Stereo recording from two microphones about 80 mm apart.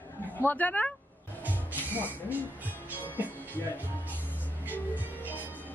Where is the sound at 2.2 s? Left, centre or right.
Right.